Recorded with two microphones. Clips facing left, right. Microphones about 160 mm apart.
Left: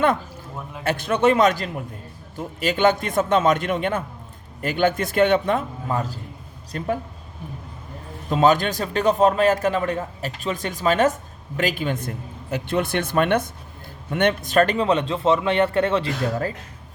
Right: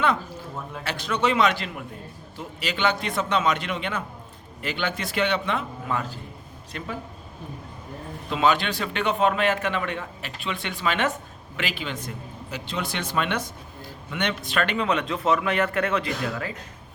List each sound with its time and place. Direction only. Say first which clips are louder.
0.9 s speech: left 6 dB; 50° left (ahead or behind)
6.7 s speech: left 8 dB; 50° left (ahead or behind)
8.3 s a man's voice: left 5 dB; 45° left (ahead or behind)